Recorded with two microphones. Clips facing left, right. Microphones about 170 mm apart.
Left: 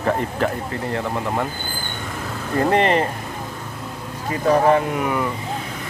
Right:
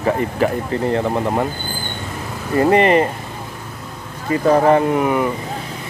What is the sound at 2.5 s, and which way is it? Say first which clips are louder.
Speech: right 4 dB; 5° right (ahead or behind).